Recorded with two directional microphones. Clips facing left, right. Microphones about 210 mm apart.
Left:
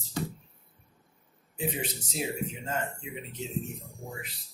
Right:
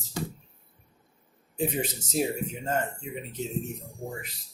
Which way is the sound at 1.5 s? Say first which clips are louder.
Right 4 dB; 45° right (ahead or behind).